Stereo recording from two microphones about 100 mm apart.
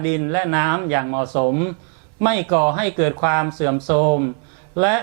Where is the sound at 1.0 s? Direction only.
20° right (ahead or behind).